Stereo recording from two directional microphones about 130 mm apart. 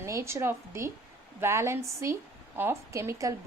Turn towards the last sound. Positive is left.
turn(degrees=-25)  # may be behind; listen again after turning